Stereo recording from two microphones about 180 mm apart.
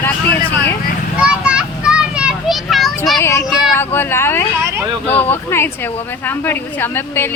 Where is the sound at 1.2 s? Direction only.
5° right (ahead or behind).